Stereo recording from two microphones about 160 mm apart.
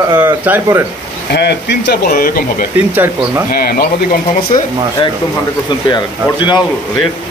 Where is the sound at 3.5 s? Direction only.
70° left (ahead or behind).